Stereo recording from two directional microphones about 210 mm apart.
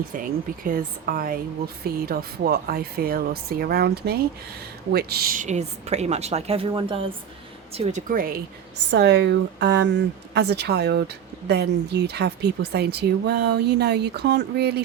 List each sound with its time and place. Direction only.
0.1 s a woman's voice: 40° right (ahead or behind)
8.1 s speech: 45° right (ahead or behind)
8.9 s speech: 55° right (ahead or behind)